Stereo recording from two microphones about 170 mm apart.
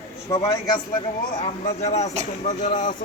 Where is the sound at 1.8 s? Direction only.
40° left (ahead or behind).